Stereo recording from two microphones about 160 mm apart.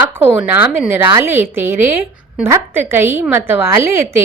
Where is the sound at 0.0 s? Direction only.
10° right (ahead or behind).